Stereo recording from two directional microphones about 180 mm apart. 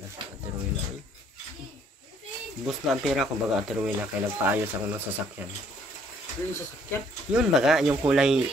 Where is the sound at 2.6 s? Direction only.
Centre (ahead or behind).